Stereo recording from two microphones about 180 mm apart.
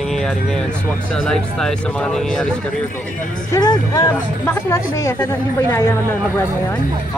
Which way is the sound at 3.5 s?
20° left (ahead or behind).